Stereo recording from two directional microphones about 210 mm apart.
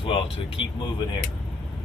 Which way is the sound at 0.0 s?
25° left (ahead or behind).